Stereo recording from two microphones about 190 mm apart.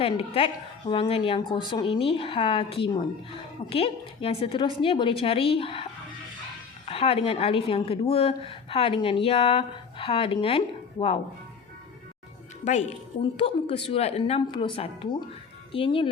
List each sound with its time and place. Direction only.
0.0 s a woman's voice: 30° left (ahead or behind)
6.8 s a woman's voice: 30° left (ahead or behind)
12.6 s a woman's voice: 40° left (ahead or behind)